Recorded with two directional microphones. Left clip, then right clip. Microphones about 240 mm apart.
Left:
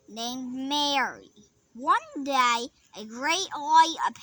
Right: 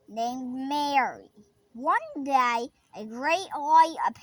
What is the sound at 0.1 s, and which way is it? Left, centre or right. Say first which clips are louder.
A woman's voice: right 4 dB; right.